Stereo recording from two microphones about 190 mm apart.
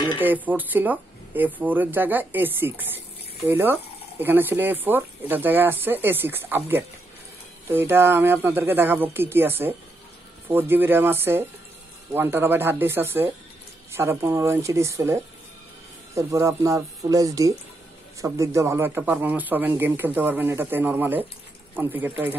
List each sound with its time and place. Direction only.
0.2 s speech: 10° right (ahead or behind)